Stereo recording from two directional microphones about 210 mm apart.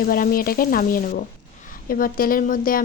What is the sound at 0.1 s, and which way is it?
Speech, 45° left (ahead or behind).